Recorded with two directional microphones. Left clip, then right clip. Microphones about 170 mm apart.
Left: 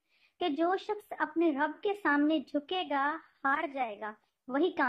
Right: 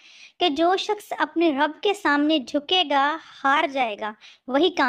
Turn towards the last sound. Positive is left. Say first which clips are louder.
# right 9 dB
turn(degrees=-35)  # may be behind; listen again after turning